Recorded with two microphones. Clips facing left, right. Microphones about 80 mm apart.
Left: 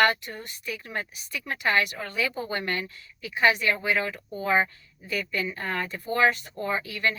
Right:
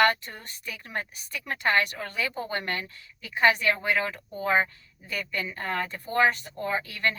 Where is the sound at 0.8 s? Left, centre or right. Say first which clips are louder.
Even; right.